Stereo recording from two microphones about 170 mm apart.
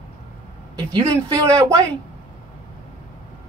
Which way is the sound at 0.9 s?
20° right (ahead or behind).